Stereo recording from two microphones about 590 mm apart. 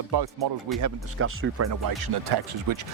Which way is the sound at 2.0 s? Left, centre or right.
Right.